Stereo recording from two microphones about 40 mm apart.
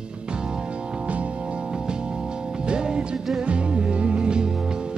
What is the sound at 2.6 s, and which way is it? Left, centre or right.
Music, right.